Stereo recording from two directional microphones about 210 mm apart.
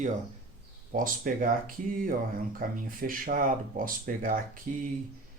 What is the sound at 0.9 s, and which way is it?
Speech, 40° right (ahead or behind).